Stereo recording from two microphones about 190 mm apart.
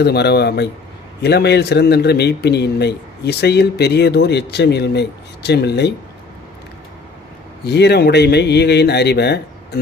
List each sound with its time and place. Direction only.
0.0 s a man's voice: 60° left (ahead or behind)
7.6 s a man's voice: 60° left (ahead or behind)